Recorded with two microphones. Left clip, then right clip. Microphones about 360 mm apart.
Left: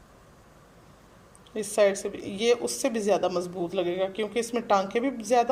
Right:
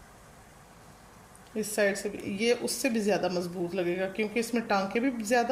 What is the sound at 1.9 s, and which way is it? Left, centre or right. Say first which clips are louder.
Speech: left 1 dB; left.